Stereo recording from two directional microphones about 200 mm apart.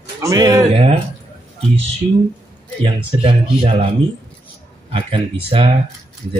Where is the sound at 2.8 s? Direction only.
25° right (ahead or behind).